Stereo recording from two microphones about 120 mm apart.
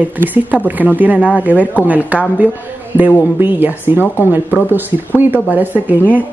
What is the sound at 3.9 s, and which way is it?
Speech, 20° left (ahead or behind).